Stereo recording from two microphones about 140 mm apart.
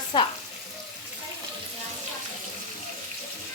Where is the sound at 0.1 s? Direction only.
30° left (ahead or behind).